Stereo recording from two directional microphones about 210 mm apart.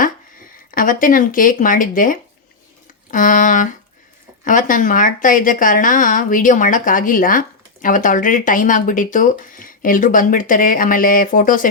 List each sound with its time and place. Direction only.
0.7 s a woman's voice: 40° left (ahead or behind)